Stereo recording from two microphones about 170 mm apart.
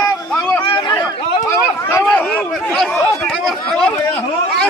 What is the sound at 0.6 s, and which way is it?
Chatter, 25° left (ahead or behind).